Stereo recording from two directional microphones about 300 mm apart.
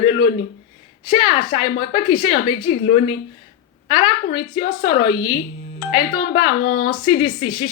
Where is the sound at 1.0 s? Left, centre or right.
Centre.